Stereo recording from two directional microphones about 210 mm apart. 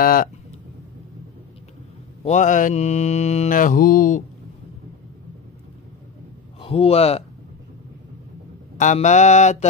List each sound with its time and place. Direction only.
0.0 s speech: 45° left (ahead or behind)
2.2 s mantra: 35° left (ahead or behind)
6.6 s speech: 25° left (ahead or behind)
8.7 s mantra: 35° left (ahead or behind)